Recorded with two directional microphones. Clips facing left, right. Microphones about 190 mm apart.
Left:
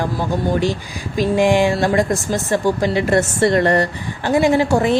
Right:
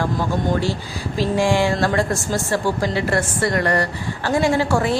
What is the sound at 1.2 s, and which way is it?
A woman's voice, 20° left (ahead or behind).